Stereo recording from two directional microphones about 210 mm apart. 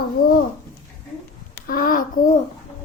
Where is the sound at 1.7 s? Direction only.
40° left (ahead or behind).